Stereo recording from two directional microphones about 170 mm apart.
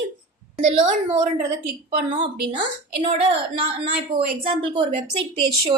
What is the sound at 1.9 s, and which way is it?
Speech, 40° right (ahead or behind).